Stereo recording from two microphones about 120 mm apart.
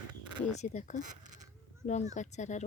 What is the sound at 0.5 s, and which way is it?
Speech, 85° left.